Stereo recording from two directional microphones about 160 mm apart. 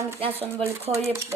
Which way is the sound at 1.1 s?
15° right (ahead or behind).